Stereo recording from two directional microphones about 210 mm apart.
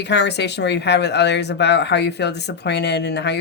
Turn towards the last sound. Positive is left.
turn(degrees=55)  # may be behind; listen again after turning